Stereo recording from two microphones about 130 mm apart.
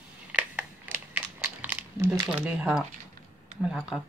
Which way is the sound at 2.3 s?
10° right (ahead or behind).